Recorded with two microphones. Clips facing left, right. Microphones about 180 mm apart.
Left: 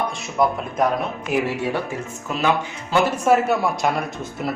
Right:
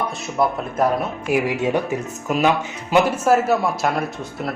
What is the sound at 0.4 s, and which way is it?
Speech, 5° right (ahead or behind).